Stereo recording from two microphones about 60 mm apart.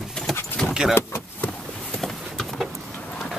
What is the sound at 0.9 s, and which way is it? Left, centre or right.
Vehicle, left.